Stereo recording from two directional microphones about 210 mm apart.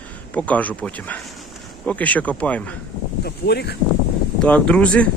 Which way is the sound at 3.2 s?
50° left (ahead or behind).